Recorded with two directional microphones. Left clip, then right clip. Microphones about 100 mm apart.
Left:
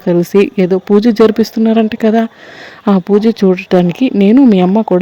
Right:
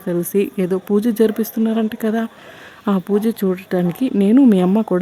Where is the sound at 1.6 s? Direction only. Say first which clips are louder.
Left 9 dB; 45° left (ahead or behind).